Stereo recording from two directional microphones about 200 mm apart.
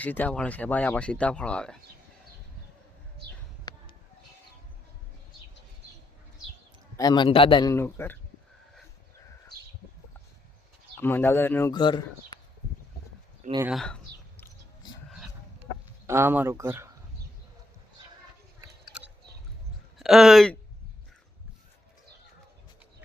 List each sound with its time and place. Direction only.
0.0 s speech: 10° left (ahead or behind)
3.7 s a sound: 20° left (ahead or behind)
6.9 s a man's voice: 20° left (ahead or behind)
11.0 s speech: 10° left (ahead or behind)
11.7 s a man's voice: 20° left (ahead or behind)
13.7 s a sound: centre (ahead or behind)
16.0 s speech: 10° right (ahead or behind)
18.6 s a sound: 5° right (ahead or behind)
20.0 s speech: centre (ahead or behind)